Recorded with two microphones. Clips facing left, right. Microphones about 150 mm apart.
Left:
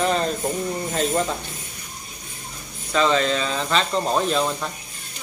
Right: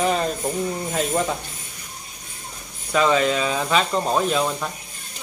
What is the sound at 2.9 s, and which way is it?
Speech, 10° right (ahead or behind).